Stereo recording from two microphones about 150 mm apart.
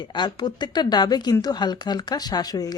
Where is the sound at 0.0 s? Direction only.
30° left (ahead or behind).